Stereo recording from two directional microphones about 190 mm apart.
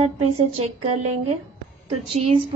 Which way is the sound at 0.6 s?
35° right (ahead or behind).